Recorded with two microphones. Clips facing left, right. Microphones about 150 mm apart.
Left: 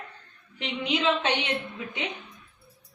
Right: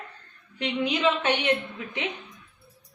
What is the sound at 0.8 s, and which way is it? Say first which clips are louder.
Speech: right 1 dB; 20° left (ahead or behind).